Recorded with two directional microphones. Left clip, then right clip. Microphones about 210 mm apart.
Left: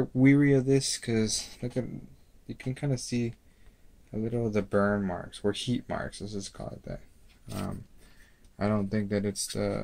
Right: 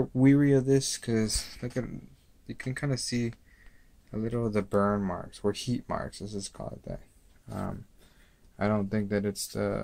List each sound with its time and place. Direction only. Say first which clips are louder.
0.1 s speech: left 1 dB; 5° right (ahead or behind)